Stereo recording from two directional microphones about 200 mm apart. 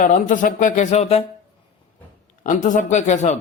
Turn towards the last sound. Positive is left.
turn(degrees=35)  # may be behind; listen again after turning